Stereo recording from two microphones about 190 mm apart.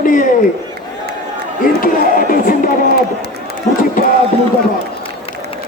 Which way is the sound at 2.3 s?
45° left (ahead or behind).